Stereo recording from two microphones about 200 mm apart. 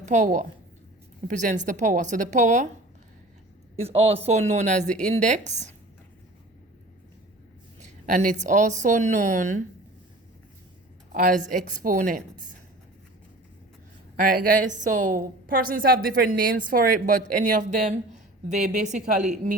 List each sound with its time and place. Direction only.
0.0 s a woman's voice: 35° right (ahead or behind)
3.8 s a woman's voice: 30° right (ahead or behind)
8.0 s a woman's voice: 40° right (ahead or behind)
11.1 s a woman's voice: 45° right (ahead or behind)
14.2 s a woman's voice: 45° right (ahead or behind)